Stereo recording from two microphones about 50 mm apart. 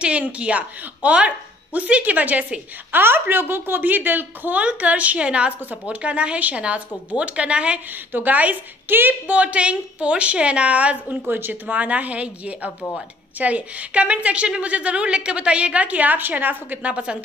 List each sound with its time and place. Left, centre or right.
0.0 s a woman's voice: right
3.0 s speech: right
4.6 s a woman's voice: right
7.9 s a woman's voice: right
9.3 s a woman's voice: right
11.2 s speech: right
11.6 s a woman's voice: right
16.9 s a woman's voice: right